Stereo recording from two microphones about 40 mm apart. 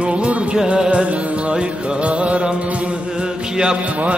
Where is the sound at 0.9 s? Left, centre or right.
Right.